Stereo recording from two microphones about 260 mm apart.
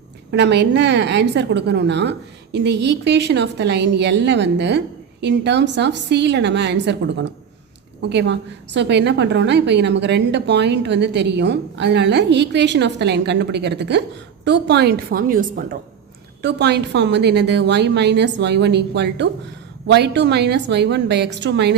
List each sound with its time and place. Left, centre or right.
0.3 s a woman's voice: right